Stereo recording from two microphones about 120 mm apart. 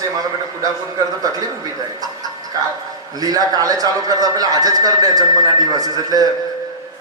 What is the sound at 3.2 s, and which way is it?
A man's voice, 30° right (ahead or behind).